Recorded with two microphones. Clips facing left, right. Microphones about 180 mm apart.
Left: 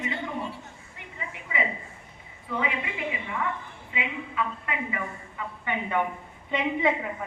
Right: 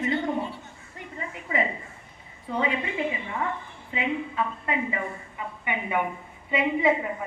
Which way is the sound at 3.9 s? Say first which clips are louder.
Right 5 dB; 35° right (ahead or behind).